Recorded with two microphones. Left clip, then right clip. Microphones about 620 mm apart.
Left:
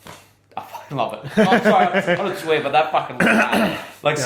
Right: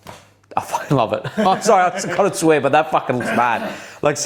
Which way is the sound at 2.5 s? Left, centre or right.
Right.